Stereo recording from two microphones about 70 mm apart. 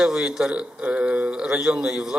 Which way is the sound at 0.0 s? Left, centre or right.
Centre.